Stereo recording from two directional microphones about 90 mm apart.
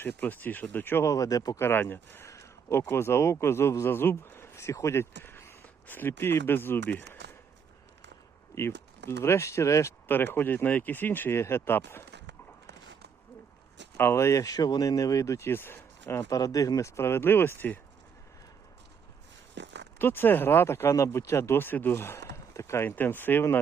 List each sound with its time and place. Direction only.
0.0 s speech: 20° left (ahead or behind)
1.1 s speech: 40° left (ahead or behind)
1.5 s a man's voice: 25° left (ahead or behind)
8.5 s speech: 30° left (ahead or behind)
10.1 s speech: 20° left (ahead or behind)
13.9 s speech: 30° left (ahead or behind)
16.3 s speech: 40° left (ahead or behind); by 17.7 s 25° left (ahead or behind)
20.0 s speech: 25° left (ahead or behind)